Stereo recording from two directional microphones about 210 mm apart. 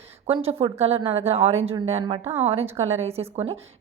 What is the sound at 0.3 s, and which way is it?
A woman's voice, 25° right (ahead or behind).